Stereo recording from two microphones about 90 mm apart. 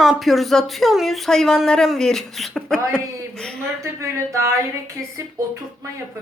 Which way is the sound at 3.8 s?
35° right (ahead or behind).